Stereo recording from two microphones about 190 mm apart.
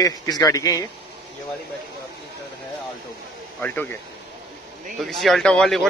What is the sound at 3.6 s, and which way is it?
Speech, 10° left (ahead or behind).